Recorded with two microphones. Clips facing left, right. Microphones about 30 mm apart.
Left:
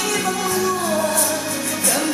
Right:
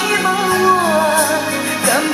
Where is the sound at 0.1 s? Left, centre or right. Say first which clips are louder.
Right 8 dB; right.